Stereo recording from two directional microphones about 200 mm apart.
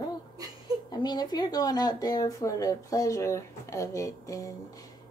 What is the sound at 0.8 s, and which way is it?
Speech, 20° left (ahead or behind).